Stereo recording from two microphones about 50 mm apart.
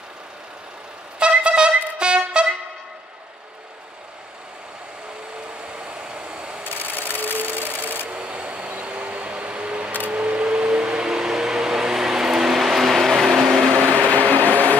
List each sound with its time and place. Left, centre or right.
1.2 s music: right
5.6 s vehicle: centre
6.6 s sewing machine: left
7.7 s rub: left
8.1 s vehicle: right
10.0 s a sound: right; by 13.7 s centre
13.7 s a sound: right
14.3 s train: right